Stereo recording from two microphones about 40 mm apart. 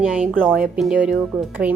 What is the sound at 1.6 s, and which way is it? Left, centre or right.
Speech, right.